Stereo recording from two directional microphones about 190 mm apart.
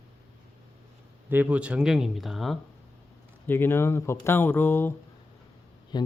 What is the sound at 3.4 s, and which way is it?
Speech, 10° left (ahead or behind).